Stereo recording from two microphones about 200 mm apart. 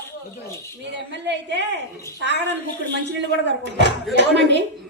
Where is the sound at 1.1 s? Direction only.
60° right (ahead or behind).